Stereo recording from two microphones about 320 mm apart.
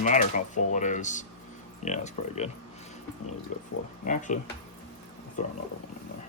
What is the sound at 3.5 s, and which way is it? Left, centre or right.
Speech, left.